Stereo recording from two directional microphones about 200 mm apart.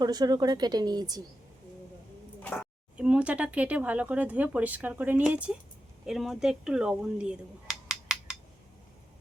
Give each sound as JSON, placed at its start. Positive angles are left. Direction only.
{"t": 0.0, "sound": "speech", "side_deg": -20}
{"t": 2.4, "sound": "a sound", "side_deg": 10}
{"t": 3.0, "sound": "speech", "side_deg": -5}